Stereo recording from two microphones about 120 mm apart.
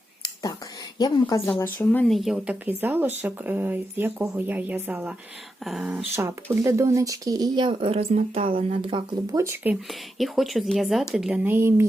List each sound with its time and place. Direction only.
0.9 s a woman's voice: 30° left (ahead or behind)
1.5 s a woman's voice: 15° left (ahead or behind)
2.0 s speech: centre (ahead or behind)
5.6 s speech: centre (ahead or behind)
5.9 s speech: 15° right (ahead or behind); by 9.0 s 45° right (ahead or behind)
9.3 s speech: 20° right (ahead or behind)
9.9 s speech: centre (ahead or behind)
11.4 s speech: 20° right (ahead or behind)